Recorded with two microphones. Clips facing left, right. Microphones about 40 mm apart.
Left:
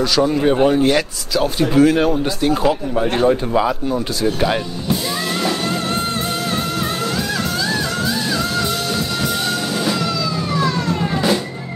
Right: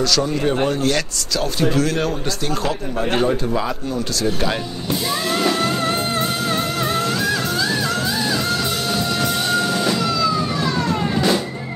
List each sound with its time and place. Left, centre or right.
0.0 s speech: centre
9.5 s train: centre